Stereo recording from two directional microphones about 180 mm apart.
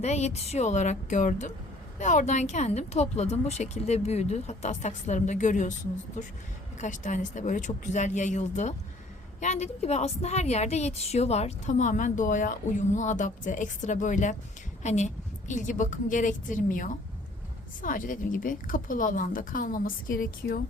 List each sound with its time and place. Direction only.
0.0 s a woman's voice: 40° left (ahead or behind)
6.7 s a woman's voice: 40° left (ahead or behind)